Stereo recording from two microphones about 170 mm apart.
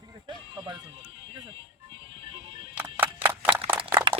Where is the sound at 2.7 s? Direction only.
10° right (ahead or behind).